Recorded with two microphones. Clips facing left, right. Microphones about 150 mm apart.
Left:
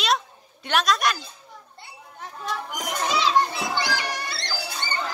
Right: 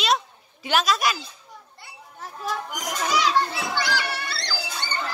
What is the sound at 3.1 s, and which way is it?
A child's voice, 20° left (ahead or behind).